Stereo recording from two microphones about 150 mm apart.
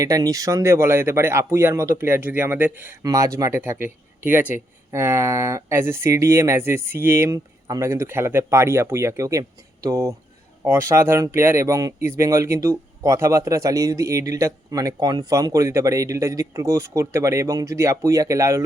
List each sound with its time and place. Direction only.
0.0 s speech: 25° right (ahead or behind)